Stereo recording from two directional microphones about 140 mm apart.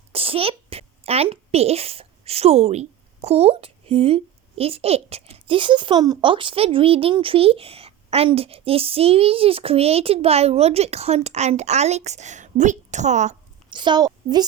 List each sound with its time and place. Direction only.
0.1 s a woman's voice: 45° right (ahead or behind)
13.7 s a woman's voice: 35° right (ahead or behind)